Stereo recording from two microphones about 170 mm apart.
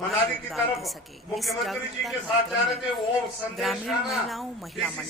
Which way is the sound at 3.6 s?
Centre (ahead or behind).